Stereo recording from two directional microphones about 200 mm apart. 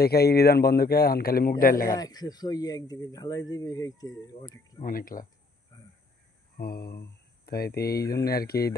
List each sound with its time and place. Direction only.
0.0 s a man's voice: 50° left (ahead or behind)
2.0 s speech: 20° left (ahead or behind)
4.8 s a man's voice: 45° left (ahead or behind)
6.5 s a man's voice: 50° left (ahead or behind)